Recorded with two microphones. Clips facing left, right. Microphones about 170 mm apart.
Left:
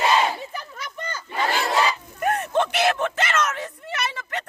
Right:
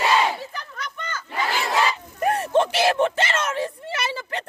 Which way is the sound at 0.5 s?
5° left (ahead or behind).